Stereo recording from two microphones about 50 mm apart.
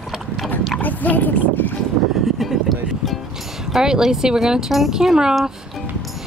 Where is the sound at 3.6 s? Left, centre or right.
Centre.